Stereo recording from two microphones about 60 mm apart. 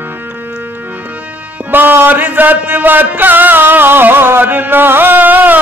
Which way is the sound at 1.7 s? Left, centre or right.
Right.